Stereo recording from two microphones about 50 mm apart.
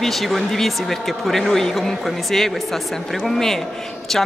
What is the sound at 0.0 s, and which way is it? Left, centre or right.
Speech, centre.